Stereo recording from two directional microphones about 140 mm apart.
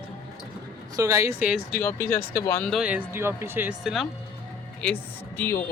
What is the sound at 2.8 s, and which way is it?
Speech, 15° right (ahead or behind).